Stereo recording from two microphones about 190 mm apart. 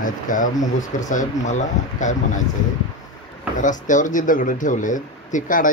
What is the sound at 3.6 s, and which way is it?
Speech, 40° left (ahead or behind).